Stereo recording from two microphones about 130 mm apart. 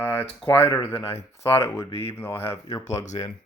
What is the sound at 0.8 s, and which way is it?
Speech, 55° left (ahead or behind).